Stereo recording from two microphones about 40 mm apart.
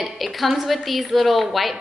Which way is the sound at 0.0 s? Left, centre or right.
Centre.